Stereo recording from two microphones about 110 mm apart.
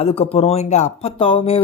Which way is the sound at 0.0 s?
65° left (ahead or behind).